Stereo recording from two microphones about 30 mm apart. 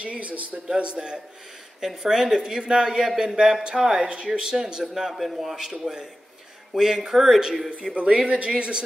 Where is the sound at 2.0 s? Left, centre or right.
Centre.